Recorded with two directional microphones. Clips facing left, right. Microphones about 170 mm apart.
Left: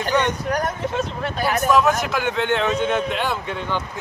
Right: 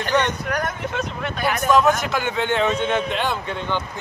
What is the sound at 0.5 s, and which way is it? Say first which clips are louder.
Speech: left 2 dB; 35° left (ahead or behind).